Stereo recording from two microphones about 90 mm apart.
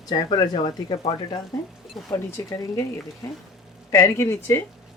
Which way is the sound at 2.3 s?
35° left (ahead or behind).